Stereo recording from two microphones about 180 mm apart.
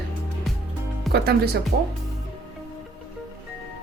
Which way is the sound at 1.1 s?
60° right (ahead or behind).